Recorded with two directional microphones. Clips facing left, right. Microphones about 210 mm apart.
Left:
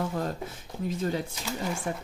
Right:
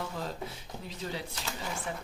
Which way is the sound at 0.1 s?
50° left (ahead or behind).